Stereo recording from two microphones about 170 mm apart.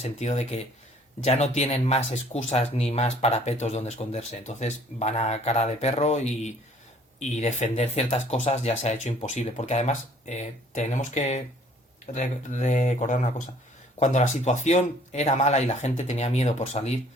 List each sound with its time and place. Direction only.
0.0 s speech: 40° left (ahead or behind)